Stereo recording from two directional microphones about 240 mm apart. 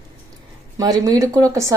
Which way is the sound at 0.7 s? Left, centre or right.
Centre.